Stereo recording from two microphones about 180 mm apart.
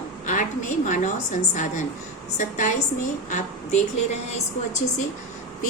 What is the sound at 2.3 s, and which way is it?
Speech, 45° left (ahead or behind).